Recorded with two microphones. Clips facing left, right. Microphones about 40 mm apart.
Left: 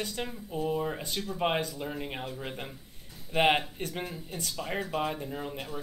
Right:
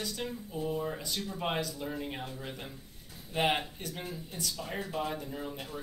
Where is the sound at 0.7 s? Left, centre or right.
Left.